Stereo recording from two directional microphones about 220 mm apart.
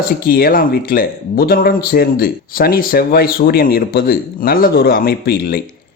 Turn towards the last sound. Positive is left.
turn(degrees=45)  # may be behind; listen again after turning